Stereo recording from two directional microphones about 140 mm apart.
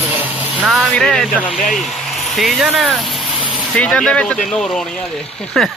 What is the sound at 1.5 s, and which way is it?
Vehicle, centre (ahead or behind).